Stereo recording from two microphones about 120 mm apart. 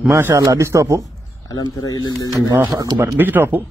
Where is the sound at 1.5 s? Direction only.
30° left (ahead or behind).